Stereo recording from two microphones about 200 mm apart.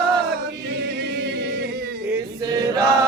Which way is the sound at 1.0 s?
55° right (ahead or behind).